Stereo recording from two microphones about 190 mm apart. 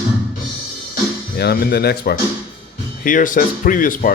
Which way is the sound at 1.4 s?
55° left (ahead or behind).